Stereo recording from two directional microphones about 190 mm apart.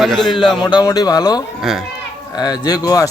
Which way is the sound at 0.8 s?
20° left (ahead or behind).